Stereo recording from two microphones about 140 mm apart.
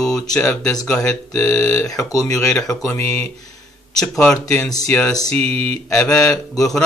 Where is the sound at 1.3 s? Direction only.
20° left (ahead or behind).